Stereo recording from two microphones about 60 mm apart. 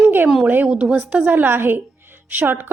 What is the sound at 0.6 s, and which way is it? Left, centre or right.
A woman's voice, centre.